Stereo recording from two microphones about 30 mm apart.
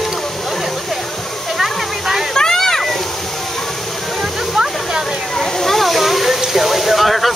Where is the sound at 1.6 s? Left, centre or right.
Centre.